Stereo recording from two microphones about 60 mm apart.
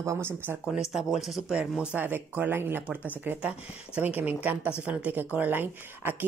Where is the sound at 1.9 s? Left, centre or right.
Right.